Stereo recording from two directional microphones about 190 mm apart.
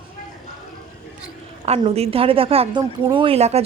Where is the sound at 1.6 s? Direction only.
35° right (ahead or behind).